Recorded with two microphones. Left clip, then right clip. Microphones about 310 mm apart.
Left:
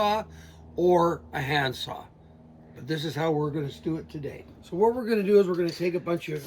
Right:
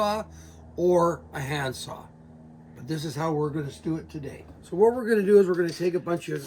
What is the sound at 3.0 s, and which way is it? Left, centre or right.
Speech, centre.